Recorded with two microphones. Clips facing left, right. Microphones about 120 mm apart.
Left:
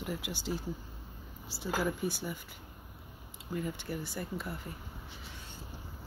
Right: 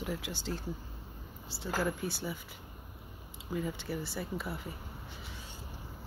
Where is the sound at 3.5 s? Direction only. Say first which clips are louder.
Right 1 dB; centre (ahead or behind).